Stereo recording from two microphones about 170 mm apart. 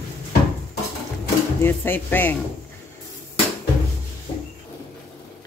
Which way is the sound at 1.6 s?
15° left (ahead or behind).